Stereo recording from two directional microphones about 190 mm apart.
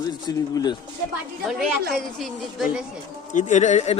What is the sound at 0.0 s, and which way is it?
Speech, 20° left (ahead or behind).